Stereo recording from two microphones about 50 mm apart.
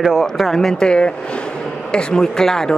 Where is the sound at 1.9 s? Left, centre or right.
Centre.